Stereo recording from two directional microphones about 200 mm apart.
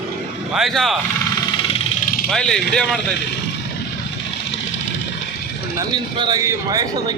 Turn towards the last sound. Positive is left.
turn(degrees=-20)  # may be behind; listen again after turning